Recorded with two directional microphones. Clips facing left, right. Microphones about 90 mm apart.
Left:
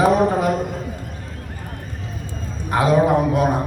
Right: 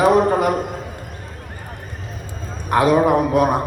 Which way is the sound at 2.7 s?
60° right (ahead or behind).